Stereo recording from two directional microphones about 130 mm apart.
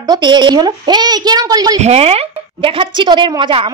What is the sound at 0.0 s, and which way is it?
Speech, 35° right (ahead or behind).